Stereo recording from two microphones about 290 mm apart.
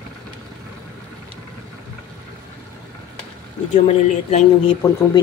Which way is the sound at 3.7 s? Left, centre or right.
Left.